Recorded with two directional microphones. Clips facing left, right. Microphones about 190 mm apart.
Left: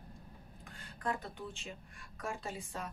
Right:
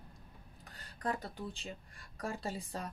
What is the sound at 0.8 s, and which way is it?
Speech, 35° right (ahead or behind).